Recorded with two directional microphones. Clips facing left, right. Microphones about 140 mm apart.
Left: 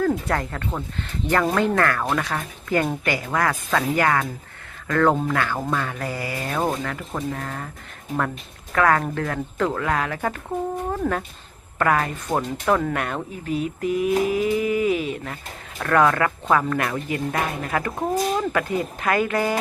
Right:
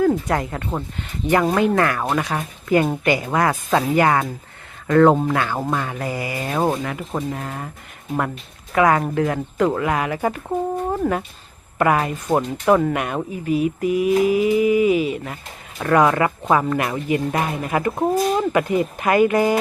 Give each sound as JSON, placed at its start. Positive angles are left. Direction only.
{"t": 0.0, "sound": "speech", "side_deg": -15}
{"t": 8.7, "sound": "speech", "side_deg": -15}